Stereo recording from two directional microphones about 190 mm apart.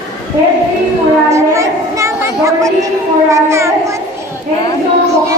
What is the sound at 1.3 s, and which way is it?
Child singing, 15° right (ahead or behind).